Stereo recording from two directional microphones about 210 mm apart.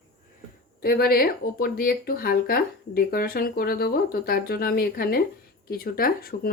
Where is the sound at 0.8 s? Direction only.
45° left (ahead or behind).